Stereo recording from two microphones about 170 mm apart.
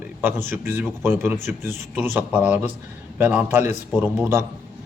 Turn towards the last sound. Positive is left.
turn(degrees=-15)  # may be behind; listen again after turning